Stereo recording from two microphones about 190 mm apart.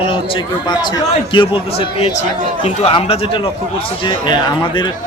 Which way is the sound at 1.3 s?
25° left (ahead or behind).